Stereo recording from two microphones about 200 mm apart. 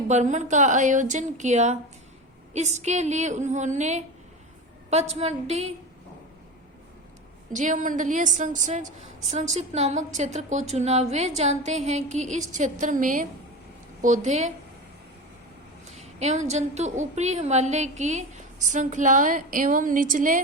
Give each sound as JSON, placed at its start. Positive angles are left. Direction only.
{"t": 0.1, "sound": "a woman's voice", "side_deg": -35}
{"t": 5.2, "sound": "a woman's voice", "side_deg": -35}
{"t": 7.5, "sound": "a woman's voice", "side_deg": -40}
{"t": 16.1, "sound": "a woman's voice", "side_deg": -35}